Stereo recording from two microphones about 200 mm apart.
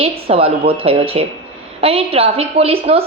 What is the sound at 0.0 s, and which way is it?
A woman's voice, 30° right (ahead or behind).